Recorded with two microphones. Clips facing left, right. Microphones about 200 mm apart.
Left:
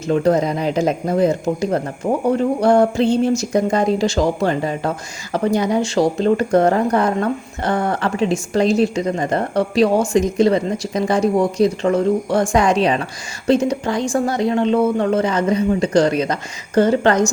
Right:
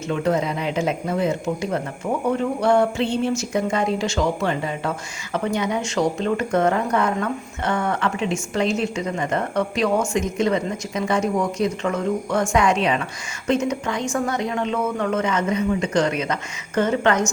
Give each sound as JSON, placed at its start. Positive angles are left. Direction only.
{"t": 0.1, "sound": "speech", "side_deg": 40}